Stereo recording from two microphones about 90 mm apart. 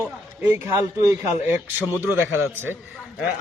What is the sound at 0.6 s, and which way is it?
Speech, 35° right (ahead or behind).